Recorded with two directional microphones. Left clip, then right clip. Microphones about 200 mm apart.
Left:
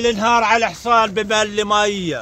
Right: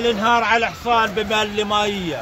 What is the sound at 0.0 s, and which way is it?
A man's voice, 25° left (ahead or behind).